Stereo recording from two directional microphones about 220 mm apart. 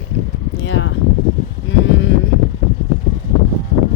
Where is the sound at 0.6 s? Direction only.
55° left (ahead or behind).